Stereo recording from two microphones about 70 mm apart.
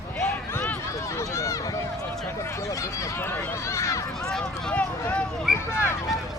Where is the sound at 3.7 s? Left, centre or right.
Left.